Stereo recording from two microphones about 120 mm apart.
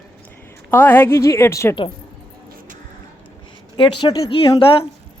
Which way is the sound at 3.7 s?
40° left (ahead or behind).